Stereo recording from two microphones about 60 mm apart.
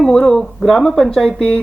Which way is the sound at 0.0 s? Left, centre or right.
Centre.